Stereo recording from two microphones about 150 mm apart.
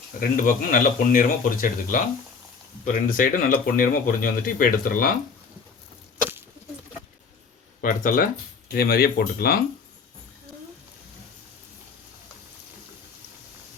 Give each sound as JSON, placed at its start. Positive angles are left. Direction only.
{"t": 0.2, "sound": "speech", "side_deg": 65}
{"t": 7.8, "sound": "speech", "side_deg": 65}
{"t": 8.7, "sound": "speech", "side_deg": 85}